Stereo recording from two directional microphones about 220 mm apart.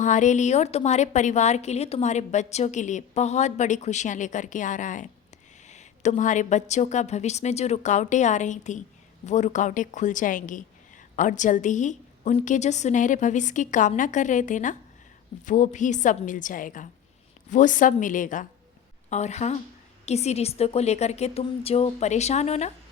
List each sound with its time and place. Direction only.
0.0 s a woman's voice: 35° left (ahead or behind)